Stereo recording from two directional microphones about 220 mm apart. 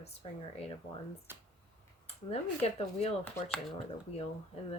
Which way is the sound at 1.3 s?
10° right (ahead or behind).